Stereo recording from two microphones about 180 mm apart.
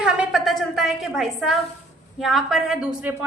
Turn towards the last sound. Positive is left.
turn(degrees=-5)  # may be behind; listen again after turning